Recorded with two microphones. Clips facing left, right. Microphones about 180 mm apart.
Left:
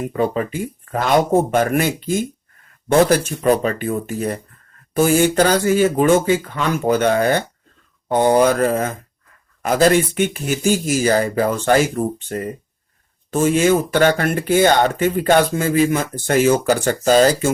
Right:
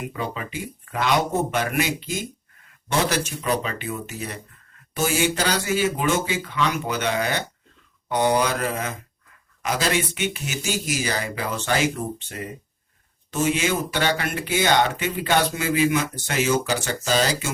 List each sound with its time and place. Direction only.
0.0 s speech: 45° left (ahead or behind)